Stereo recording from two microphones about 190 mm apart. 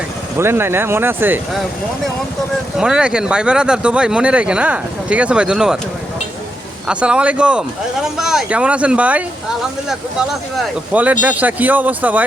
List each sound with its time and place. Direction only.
0.3 s speech: 10° right (ahead or behind)
2.7 s speech: 5° right (ahead or behind)
6.8 s speech: 5° right (ahead or behind)